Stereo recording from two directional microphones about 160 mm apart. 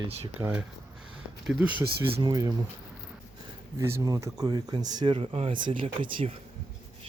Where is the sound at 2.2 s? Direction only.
25° right (ahead or behind).